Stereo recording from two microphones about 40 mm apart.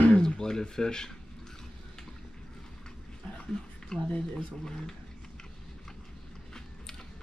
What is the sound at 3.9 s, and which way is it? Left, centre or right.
Speech, centre.